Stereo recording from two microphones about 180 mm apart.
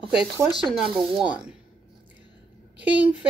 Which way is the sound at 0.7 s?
Centre (ahead or behind).